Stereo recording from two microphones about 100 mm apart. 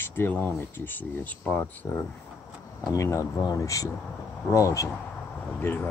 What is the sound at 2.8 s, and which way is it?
Speech, 35° left (ahead or behind).